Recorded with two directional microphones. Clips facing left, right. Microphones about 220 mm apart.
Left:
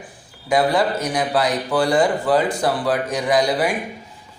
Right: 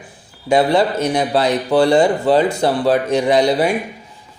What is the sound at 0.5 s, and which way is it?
A man's voice, 25° right (ahead or behind).